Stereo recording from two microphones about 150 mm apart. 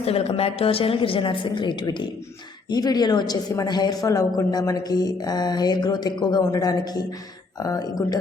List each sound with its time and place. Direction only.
0.0 s a woman's voice: 40° left (ahead or behind); by 8.2 s 25° left (ahead or behind)